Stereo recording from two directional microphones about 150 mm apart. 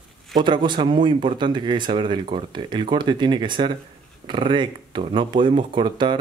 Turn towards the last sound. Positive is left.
turn(degrees=-30)  # may be behind; listen again after turning